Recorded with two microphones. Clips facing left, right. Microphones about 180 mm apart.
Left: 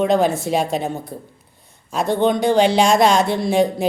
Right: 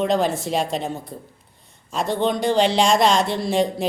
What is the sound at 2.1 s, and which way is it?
Speech, 50° left (ahead or behind).